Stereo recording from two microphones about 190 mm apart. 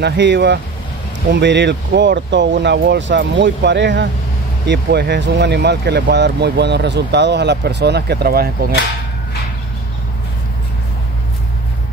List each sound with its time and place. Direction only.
0.0 s speech: 65° right (ahead or behind)